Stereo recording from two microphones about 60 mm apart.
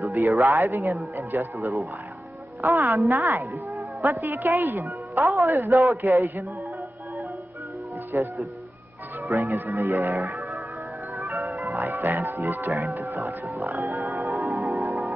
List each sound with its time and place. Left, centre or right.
0.0 s speech: right
5.2 s speech: right
8.1 s speech: right
11.2 s music: right
11.7 s speech: right
14.1 s change ringing: right